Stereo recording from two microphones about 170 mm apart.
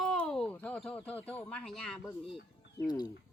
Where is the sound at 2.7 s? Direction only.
25° left (ahead or behind).